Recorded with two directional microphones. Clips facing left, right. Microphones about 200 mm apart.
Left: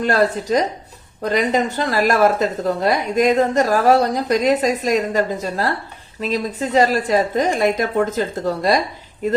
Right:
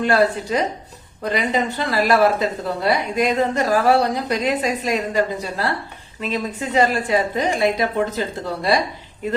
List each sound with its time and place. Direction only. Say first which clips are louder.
0.0 s a woman's voice: even; 40° left (ahead or behind)